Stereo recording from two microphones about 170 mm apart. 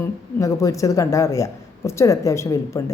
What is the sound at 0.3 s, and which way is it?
A woman's voice, 20° left (ahead or behind).